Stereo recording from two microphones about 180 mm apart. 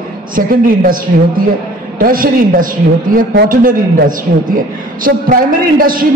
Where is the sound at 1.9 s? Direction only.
50° right (ahead or behind).